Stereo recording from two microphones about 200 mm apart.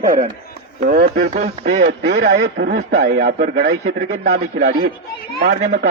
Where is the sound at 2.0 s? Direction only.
65° right (ahead or behind).